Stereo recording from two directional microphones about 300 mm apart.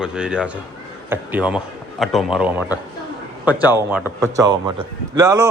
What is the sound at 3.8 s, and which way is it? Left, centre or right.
A man's voice, centre.